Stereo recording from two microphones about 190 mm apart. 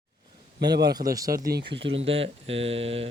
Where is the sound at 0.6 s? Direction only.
60° right (ahead or behind).